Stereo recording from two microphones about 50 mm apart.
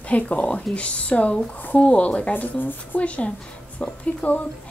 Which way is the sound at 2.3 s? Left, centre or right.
Left.